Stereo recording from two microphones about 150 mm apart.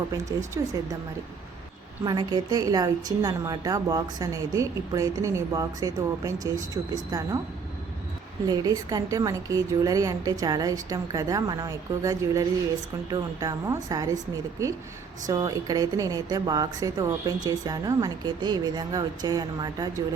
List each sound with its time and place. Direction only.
0.1 s a woman's voice: 20° right (ahead or behind)
2.0 s a woman's voice: 25° right (ahead or behind)
8.4 s a woman's voice: 25° right (ahead or behind)
15.3 s a woman's voice: 25° right (ahead or behind)